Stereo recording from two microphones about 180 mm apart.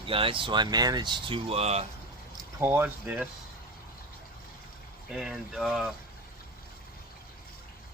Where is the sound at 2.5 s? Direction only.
15° right (ahead or behind).